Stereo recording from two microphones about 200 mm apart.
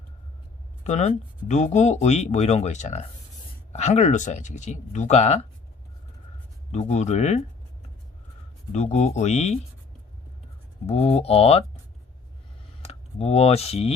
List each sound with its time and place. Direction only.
0.9 s speech: 35° left (ahead or behind)
6.7 s speech: 35° left (ahead or behind)
8.7 s speech: 35° left (ahead or behind)
10.8 s speech: 30° left (ahead or behind)
12.8 s speech: 30° left (ahead or behind)